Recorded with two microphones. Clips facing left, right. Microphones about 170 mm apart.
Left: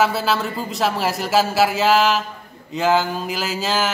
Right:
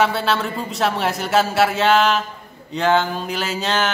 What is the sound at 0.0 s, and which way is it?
A man's voice, centre (ahead or behind).